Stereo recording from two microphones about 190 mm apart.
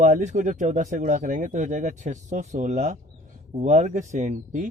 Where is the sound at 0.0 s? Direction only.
40° right (ahead or behind).